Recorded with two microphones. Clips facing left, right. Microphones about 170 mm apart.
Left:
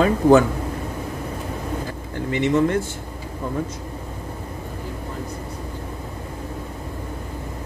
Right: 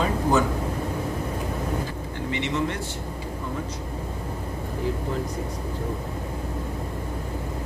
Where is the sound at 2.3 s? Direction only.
50° left (ahead or behind).